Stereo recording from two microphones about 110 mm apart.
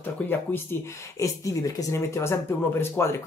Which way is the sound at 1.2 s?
30° left (ahead or behind).